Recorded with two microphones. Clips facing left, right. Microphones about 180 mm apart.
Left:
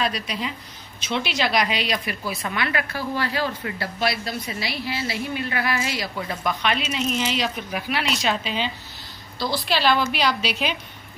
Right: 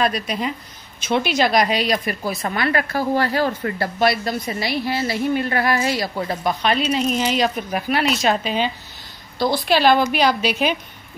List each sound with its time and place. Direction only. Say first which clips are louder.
0.0 s a woman's voice: right 5 dB; 50° right (ahead or behind)